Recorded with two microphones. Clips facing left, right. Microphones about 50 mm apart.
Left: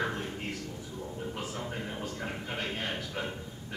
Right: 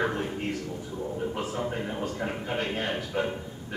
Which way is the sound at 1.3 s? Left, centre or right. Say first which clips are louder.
Right 6 dB; centre.